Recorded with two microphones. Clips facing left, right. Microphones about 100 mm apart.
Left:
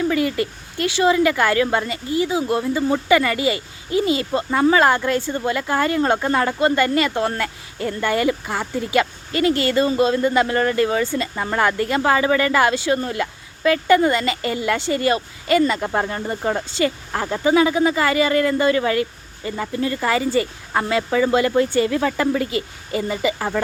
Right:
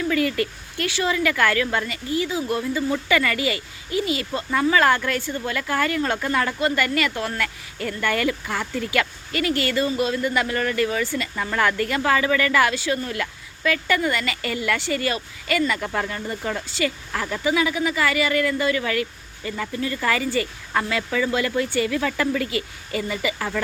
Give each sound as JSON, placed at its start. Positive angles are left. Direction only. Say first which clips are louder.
{"t": 0.1, "sound": "speech", "louder": "left 2 dB", "side_deg": 20}